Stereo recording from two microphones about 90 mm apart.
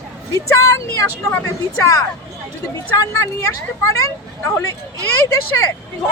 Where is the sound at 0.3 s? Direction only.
35° left (ahead or behind).